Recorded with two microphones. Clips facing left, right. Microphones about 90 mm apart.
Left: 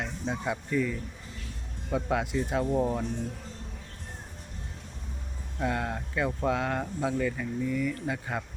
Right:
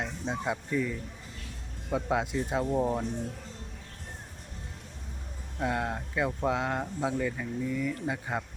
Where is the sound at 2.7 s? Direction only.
10° right (ahead or behind).